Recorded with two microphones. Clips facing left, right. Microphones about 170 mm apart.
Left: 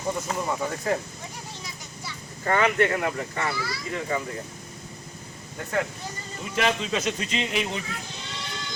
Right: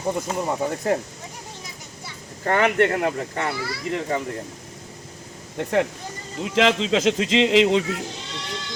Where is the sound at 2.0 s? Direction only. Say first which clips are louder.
Right 2 dB; 55° right (ahead or behind).